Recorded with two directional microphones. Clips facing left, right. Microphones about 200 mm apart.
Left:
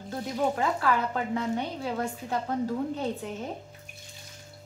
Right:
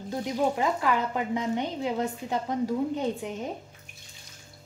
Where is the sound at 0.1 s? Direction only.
15° right (ahead or behind).